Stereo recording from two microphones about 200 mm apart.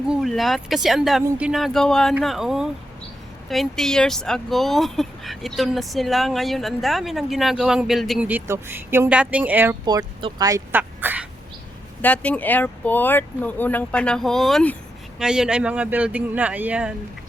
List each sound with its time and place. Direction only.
0.1 s speech: centre (ahead or behind)
9.8 s speech: 20° right (ahead or behind)
12.0 s speech: 5° left (ahead or behind)